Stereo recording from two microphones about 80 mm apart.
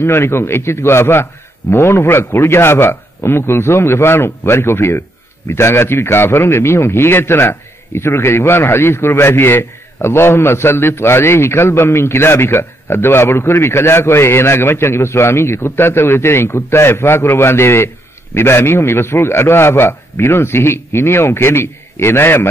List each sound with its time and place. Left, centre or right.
0.0 s a man's voice: left